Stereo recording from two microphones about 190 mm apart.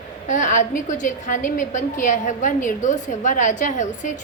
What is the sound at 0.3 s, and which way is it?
A woman's voice, 40° left (ahead or behind).